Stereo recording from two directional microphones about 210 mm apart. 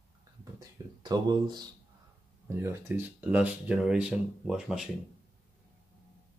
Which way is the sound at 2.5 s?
10° right (ahead or behind).